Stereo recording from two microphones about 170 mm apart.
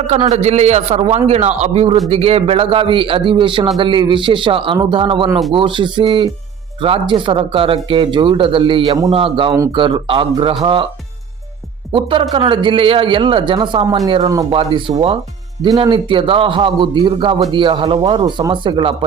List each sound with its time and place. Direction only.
0.2 s a man's voice: 40° right (ahead or behind)
11.9 s a man's voice: 30° right (ahead or behind)
14.5 s a man's voice: 30° right (ahead or behind)